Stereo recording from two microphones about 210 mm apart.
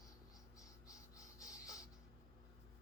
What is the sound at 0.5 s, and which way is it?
Writing, 15° left (ahead or behind).